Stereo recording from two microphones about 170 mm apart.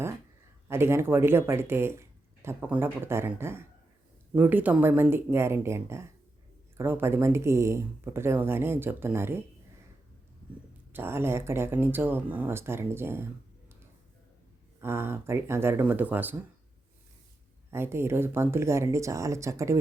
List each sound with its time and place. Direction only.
0.7 s speech: 15° right (ahead or behind)
10.9 s speech: 15° right (ahead or behind)
14.8 s speech: 15° right (ahead or behind)
17.7 s speech: 15° right (ahead or behind)